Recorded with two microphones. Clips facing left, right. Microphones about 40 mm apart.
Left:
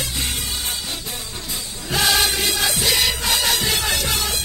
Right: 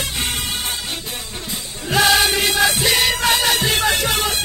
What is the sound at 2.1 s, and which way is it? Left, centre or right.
Music, right.